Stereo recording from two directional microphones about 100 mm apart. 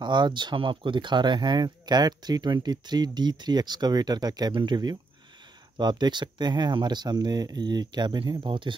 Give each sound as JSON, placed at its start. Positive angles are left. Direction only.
{"t": 0.0, "sound": "speech", "side_deg": -50}